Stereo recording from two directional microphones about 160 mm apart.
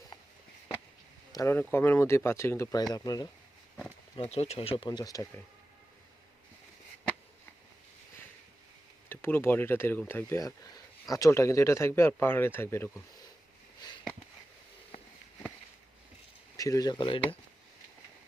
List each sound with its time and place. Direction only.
1.3 s speech: 20° left (ahead or behind)
4.2 s speech: 40° left (ahead or behind)
4.9 s speech: 25° left (ahead or behind)
9.0 s speech: 15° left (ahead or behind)
16.6 s speech: 20° left (ahead or behind)